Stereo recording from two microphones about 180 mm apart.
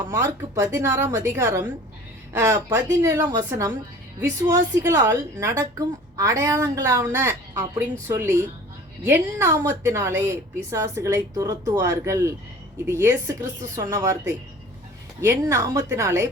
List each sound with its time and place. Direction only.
0.1 s a woman's voice: 15° right (ahead or behind)